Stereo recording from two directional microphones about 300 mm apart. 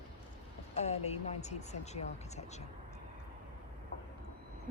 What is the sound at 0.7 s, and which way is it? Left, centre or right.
Speech, left.